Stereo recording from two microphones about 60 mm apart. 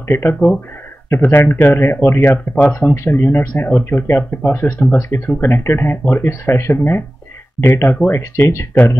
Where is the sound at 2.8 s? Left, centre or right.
Left.